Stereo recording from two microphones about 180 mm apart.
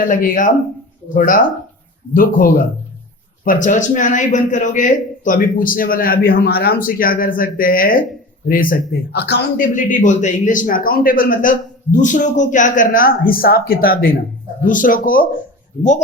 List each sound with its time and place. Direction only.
0.1 s a man's voice: 50° left (ahead or behind); by 9.4 s 65° left (ahead or behind)
9.6 s a man's voice: 45° left (ahead or behind)